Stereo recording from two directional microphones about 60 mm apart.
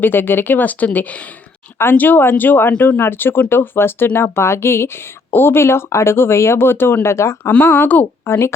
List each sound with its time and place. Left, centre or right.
0.0 s speech: left
1.8 s speech: left
7.6 s speech: left
8.2 s speech: left